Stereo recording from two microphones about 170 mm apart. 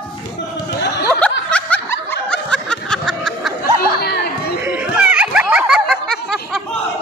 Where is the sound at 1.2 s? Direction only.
5° left (ahead or behind).